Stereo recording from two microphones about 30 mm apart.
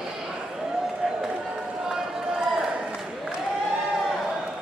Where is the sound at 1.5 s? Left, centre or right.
Centre.